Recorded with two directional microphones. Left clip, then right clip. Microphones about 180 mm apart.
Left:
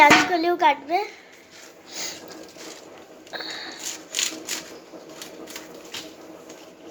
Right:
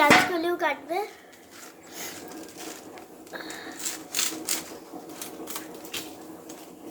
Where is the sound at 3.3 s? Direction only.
30° left (ahead or behind).